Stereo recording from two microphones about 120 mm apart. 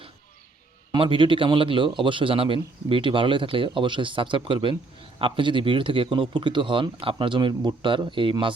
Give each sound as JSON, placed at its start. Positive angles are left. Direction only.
{"t": 0.9, "sound": "a man's voice", "side_deg": -45}